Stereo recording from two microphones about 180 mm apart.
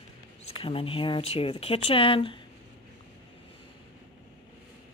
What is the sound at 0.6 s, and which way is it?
Speech, 30° left (ahead or behind).